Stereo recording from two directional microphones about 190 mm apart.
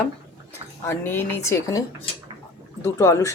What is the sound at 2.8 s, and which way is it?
Speech, 15° left (ahead or behind).